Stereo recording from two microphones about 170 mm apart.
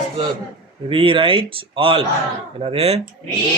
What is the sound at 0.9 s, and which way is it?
Speech, 30° right (ahead or behind).